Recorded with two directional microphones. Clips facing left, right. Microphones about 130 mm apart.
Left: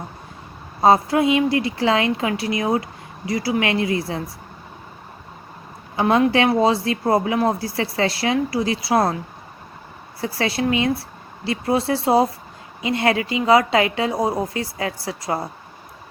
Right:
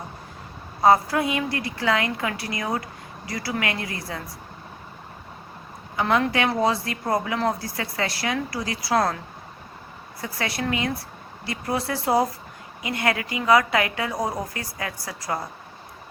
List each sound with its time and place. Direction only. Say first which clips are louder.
0.8 s a woman's voice: left 3 dB; 25° left (ahead or behind)
6.0 s a woman's voice: left 5 dB; 30° left (ahead or behind)
10.2 s a woman's voice: left 6 dB; 30° left (ahead or behind)